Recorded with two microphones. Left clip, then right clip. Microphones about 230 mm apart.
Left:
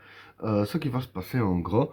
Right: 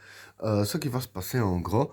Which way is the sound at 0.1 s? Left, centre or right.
Right.